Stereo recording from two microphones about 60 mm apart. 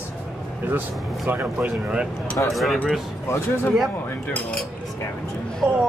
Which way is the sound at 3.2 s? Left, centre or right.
Left.